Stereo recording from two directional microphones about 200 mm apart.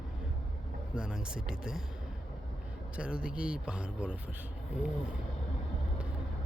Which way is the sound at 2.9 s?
5° right (ahead or behind).